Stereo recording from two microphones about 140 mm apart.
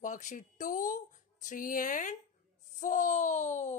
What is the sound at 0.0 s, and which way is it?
Speech, 60° left (ahead or behind).